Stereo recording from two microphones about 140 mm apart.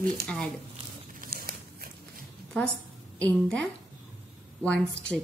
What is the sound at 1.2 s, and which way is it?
Tearing, 90° right.